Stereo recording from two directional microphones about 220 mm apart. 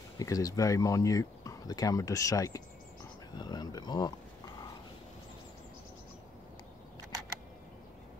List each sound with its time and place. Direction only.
0.2 s speech: 15° left (ahead or behind)